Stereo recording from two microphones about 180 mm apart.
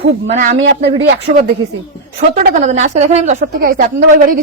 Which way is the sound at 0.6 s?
65° right (ahead or behind).